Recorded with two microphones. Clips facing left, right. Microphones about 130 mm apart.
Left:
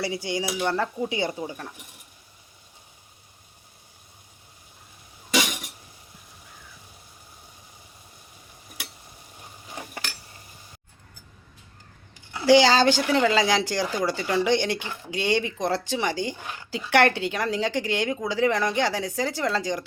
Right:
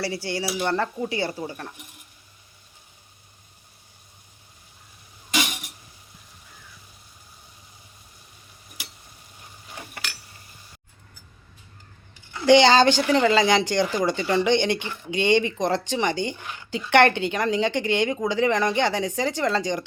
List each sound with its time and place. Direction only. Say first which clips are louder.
0.0 s speech: even; 15° left (ahead or behind)
12.3 s speech: right 2 dB; 5° left (ahead or behind)